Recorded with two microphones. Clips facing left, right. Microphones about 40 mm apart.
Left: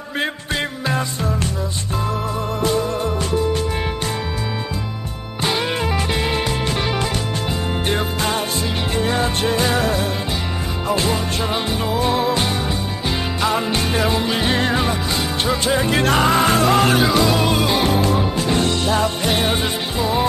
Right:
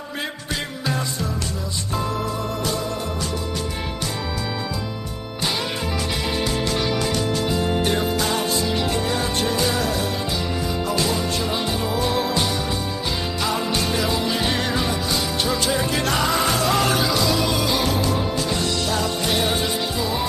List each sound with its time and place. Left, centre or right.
0.8 s music: left
7.8 s music: left